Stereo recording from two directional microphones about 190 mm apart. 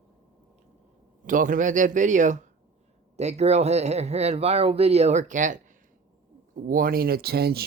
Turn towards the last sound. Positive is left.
turn(degrees=-55)  # may be behind; listen again after turning